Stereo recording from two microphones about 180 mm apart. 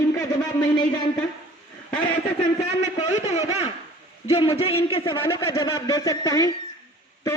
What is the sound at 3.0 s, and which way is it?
A man's voice, 35° left (ahead or behind).